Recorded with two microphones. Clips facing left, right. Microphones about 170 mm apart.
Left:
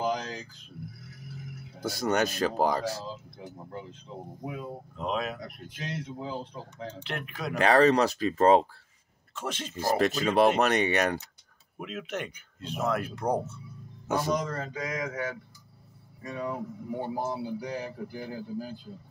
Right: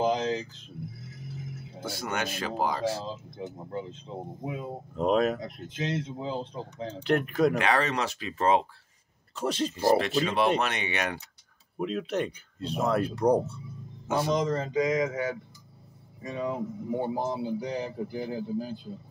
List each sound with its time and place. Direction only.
0.0 s a sound: 25° right (ahead or behind)
1.0 s music: 25° right (ahead or behind)
1.9 s speech: 40° left (ahead or behind)
3.1 s speech: 25° right (ahead or behind)
4.9 s speech: 45° right (ahead or behind)
5.4 s speech: 25° right (ahead or behind)
7.0 s speech: 45° right (ahead or behind)
7.5 s speech: 40° left (ahead or behind)
9.3 s speech: 35° right (ahead or behind)
9.9 s speech: 45° left (ahead or behind)
11.8 s speech: 35° right (ahead or behind)
14.3 s speech: 25° right (ahead or behind)